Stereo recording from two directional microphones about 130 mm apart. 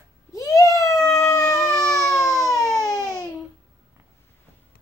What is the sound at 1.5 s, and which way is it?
Emergency vehicle, 25° right (ahead or behind).